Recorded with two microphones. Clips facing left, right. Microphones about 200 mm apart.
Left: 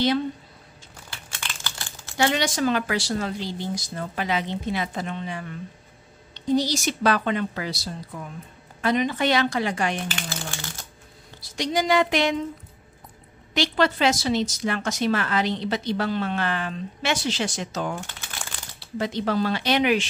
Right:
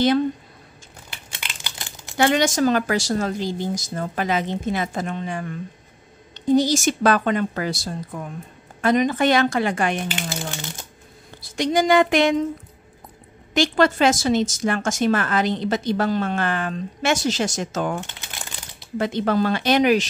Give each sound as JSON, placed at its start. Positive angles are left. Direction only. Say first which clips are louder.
{"t": 1.1, "sound": "a sound", "louder": "even", "side_deg": -20}
{"t": 2.1, "sound": "a woman's voice", "louder": "right 5 dB", "side_deg": -50}
{"t": 10.0, "sound": "speech", "louder": "right 4 dB", "side_deg": -20}
{"t": 11.5, "sound": "a woman's voice", "louder": "right 5 dB", "side_deg": -50}
{"t": 13.5, "sound": "a woman's voice", "louder": "right 4 dB", "side_deg": -45}
{"t": 18.2, "sound": "crumpling", "louder": "right 1 dB", "side_deg": -20}
{"t": 18.9, "sound": "a woman's voice", "louder": "right 4 dB", "side_deg": -55}